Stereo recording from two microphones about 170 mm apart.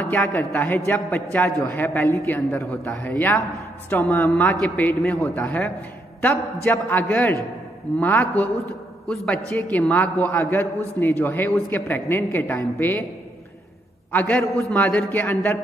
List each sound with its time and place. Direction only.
0.0 s a man's voice: 5° left (ahead or behind)
10.0 s a man's voice: 20° right (ahead or behind)
10.3 s a man's voice: 15° left (ahead or behind)
14.1 s a man's voice: 10° left (ahead or behind)